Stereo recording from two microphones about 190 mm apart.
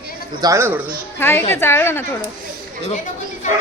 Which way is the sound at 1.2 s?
10° left (ahead or behind).